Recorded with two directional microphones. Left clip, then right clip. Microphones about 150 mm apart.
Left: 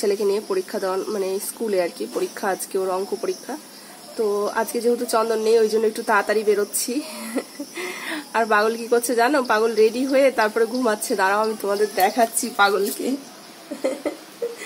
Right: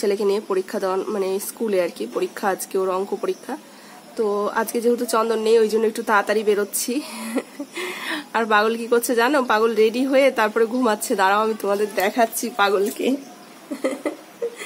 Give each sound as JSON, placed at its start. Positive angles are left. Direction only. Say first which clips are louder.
{"t": 0.0, "sound": "speech", "louder": "even", "side_deg": -25}